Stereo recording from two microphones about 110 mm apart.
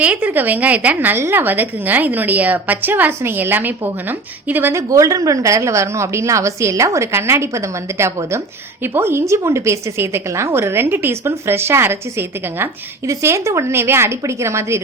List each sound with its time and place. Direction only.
0.0 s a woman's voice: 15° right (ahead or behind)
4.9 s a woman's voice: 30° right (ahead or behind)
13.1 s a woman's voice: 25° right (ahead or behind)